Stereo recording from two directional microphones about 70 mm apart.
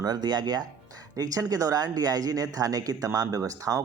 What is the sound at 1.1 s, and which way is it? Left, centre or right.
Speech, right.